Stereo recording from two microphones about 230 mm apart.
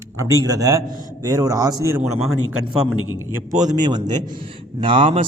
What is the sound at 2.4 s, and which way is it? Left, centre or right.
Speech, left.